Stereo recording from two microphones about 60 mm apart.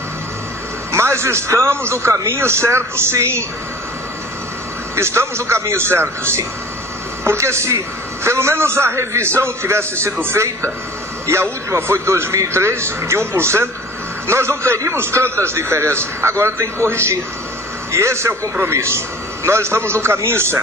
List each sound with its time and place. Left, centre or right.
0.9 s a man's voice: right
4.9 s a man's voice: right
11.7 s a man's voice: right